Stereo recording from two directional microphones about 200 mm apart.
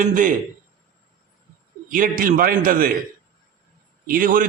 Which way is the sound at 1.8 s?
45° right (ahead or behind).